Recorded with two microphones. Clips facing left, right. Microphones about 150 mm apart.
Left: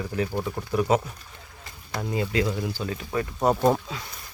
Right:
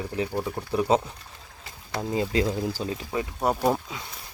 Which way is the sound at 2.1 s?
30° right (ahead or behind).